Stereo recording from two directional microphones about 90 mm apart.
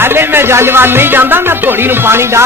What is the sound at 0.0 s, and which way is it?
Music, 25° right (ahead or behind).